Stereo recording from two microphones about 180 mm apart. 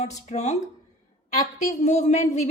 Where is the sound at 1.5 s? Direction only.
40° left (ahead or behind).